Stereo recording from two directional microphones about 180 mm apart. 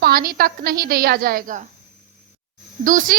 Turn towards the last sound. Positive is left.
turn(degrees=-50)  # may be behind; listen again after turning